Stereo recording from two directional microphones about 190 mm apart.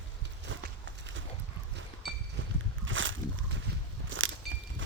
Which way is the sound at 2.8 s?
90° right.